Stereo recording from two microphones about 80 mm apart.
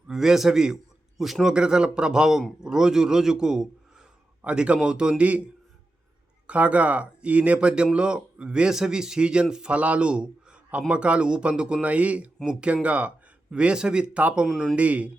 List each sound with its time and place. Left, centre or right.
0.1 s a man's voice: centre
6.5 s speech: centre